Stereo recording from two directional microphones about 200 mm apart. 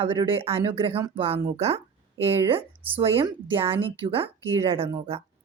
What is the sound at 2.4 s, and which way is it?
Speech, 25° right (ahead or behind).